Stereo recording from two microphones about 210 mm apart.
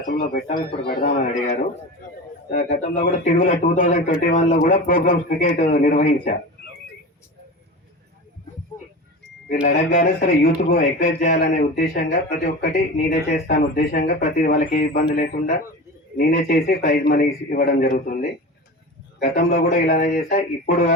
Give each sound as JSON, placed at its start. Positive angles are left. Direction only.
{"t": 0.0, "sound": "speech", "side_deg": 40}
{"t": 2.5, "sound": "speech", "side_deg": 35}
{"t": 9.5, "sound": "speech", "side_deg": 40}
{"t": 13.0, "sound": "speech", "side_deg": 45}